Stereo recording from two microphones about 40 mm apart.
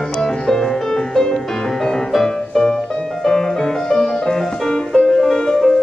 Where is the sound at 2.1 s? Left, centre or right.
Centre.